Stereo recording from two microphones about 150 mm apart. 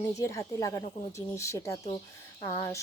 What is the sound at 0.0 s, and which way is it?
Speech, 20° left (ahead or behind).